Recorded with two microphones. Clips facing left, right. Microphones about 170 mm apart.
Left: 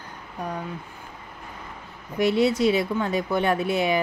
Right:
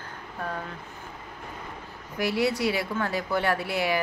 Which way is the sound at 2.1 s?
20° left (ahead or behind).